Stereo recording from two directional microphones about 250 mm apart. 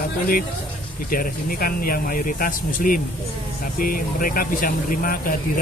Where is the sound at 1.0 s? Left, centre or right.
Left.